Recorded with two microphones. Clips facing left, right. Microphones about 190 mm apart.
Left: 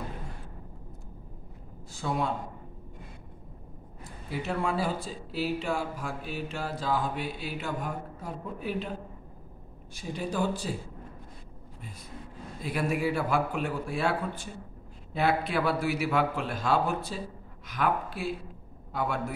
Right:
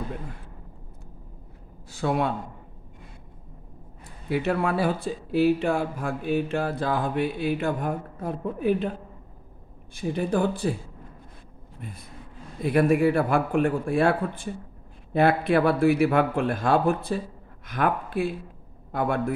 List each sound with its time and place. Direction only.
1.9 s speech: 65° right (ahead or behind)
4.3 s speech: 65° right (ahead or behind)
9.9 s speech: 55° right (ahead or behind)
12.6 s a man's voice: 55° right (ahead or behind)